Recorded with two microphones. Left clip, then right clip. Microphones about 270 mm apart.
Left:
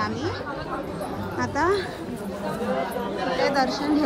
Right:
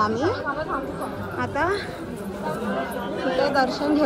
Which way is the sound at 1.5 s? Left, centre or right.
Centre.